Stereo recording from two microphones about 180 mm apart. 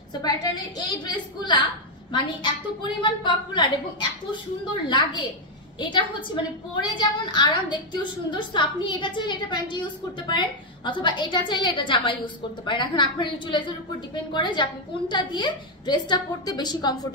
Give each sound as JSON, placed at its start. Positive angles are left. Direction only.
{"t": 0.2, "sound": "a woman's voice", "side_deg": 25}
{"t": 4.8, "sound": "a woman's voice", "side_deg": 25}